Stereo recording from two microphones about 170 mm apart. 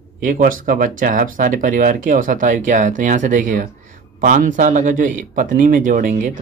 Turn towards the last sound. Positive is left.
turn(degrees=-50)  # may be behind; listen again after turning